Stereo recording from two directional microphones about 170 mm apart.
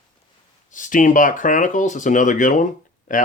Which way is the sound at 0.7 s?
50° left (ahead or behind).